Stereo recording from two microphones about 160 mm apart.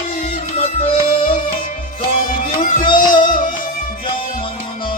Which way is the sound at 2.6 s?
60° left (ahead or behind).